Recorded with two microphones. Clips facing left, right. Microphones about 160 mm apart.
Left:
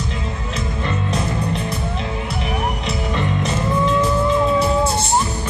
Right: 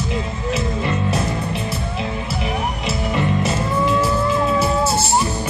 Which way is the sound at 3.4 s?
5° right (ahead or behind).